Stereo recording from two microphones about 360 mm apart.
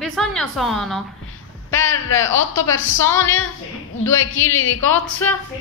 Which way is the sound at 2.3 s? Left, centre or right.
Left.